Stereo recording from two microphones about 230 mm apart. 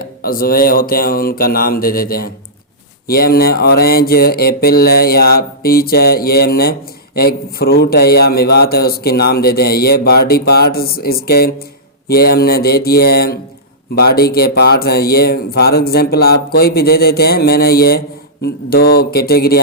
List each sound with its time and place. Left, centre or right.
0.0 s a man's voice: left